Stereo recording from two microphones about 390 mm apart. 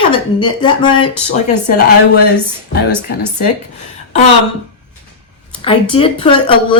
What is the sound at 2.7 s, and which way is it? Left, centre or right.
Speech, left.